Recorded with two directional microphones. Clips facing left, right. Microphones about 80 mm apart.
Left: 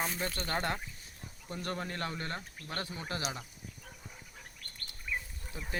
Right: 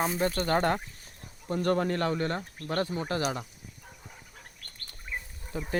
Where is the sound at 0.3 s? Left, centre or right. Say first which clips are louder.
Right 8 dB; right.